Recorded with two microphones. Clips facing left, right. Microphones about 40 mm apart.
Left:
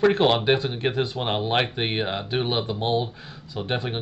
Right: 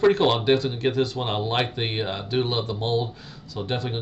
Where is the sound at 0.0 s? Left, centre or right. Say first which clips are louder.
Even; centre.